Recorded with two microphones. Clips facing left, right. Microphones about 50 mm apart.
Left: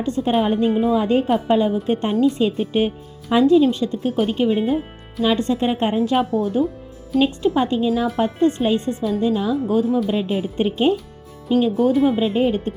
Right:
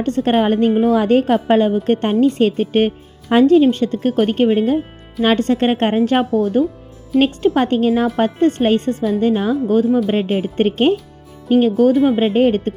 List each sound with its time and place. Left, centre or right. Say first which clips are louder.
0.0 s a woman's voice: right 4 dB; right